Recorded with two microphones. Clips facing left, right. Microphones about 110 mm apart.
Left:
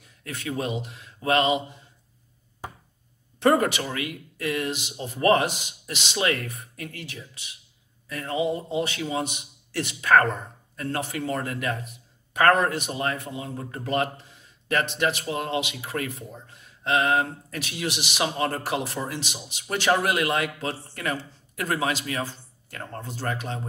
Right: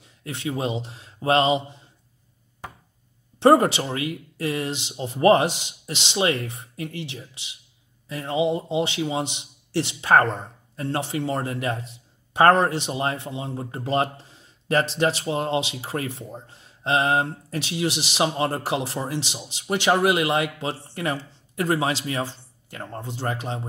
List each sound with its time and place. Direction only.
0.0 s speech: 25° right (ahead or behind)
3.3 s a man's voice: 30° right (ahead or behind)